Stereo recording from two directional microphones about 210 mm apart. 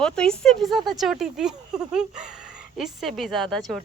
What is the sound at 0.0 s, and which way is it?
Speech, 5° left (ahead or behind).